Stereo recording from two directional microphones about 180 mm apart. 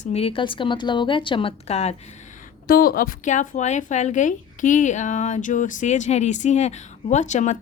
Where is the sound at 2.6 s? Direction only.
55° left (ahead or behind).